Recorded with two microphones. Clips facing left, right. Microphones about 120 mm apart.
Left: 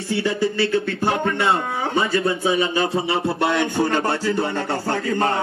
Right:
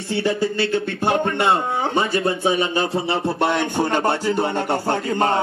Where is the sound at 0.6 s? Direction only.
25° right (ahead or behind).